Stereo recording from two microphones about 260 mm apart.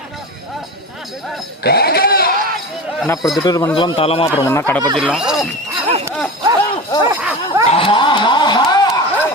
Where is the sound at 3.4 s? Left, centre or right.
Centre.